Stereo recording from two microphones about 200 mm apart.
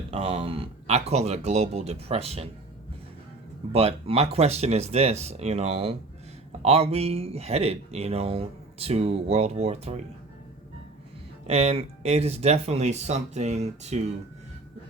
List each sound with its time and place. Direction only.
0.1 s speech: 30° right (ahead or behind)
3.7 s speech: 30° right (ahead or behind)
11.4 s speech: 30° right (ahead or behind)